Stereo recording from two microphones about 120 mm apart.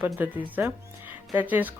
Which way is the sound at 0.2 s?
15° right (ahead or behind).